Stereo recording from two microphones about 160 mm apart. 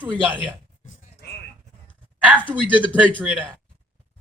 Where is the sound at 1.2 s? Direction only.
90° left.